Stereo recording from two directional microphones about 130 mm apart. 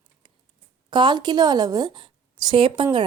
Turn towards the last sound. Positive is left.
turn(degrees=-40)  # may be behind; listen again after turning